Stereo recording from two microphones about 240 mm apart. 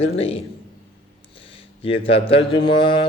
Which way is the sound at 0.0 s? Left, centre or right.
Left.